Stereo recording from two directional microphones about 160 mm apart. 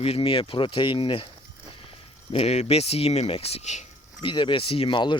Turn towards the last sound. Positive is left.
turn(degrees=30)  # may be behind; listen again after turning